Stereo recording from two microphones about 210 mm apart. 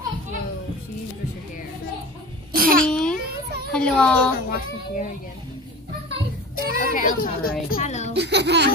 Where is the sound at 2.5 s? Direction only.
45° right (ahead or behind).